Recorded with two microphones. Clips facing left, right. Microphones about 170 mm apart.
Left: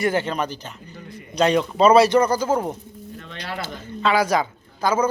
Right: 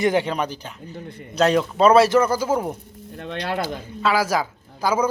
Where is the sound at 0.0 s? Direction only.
15° right (ahead or behind).